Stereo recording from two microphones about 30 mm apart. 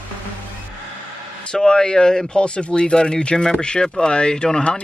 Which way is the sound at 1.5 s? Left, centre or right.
Left.